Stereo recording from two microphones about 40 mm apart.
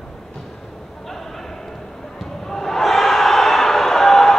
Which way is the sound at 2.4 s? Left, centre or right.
Centre.